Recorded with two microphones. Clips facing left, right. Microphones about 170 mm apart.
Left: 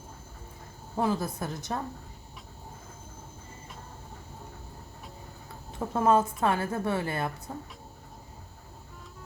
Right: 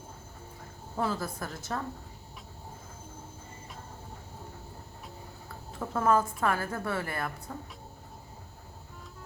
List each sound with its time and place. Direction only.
0.9 s a woman's voice: 20° left (ahead or behind)
5.9 s a woman's voice: 20° left (ahead or behind)